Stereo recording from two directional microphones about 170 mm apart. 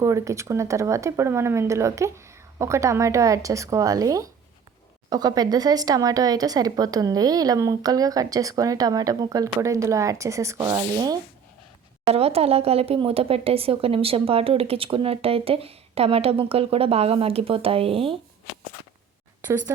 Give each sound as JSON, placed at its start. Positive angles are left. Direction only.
{"t": 0.0, "sound": "speech", "side_deg": -20}
{"t": 12.0, "sound": "speech", "side_deg": -35}